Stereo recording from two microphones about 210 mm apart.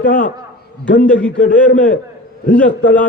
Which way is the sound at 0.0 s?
40° left (ahead or behind).